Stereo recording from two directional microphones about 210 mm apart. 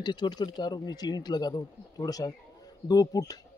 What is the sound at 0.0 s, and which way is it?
Speech, 20° left (ahead or behind).